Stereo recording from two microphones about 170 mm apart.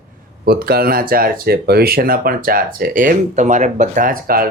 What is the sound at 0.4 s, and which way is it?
Speech, 65° right (ahead or behind).